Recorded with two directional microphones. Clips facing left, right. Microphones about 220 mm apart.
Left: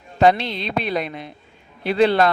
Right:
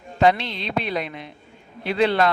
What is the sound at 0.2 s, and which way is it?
Speech, 35° left (ahead or behind).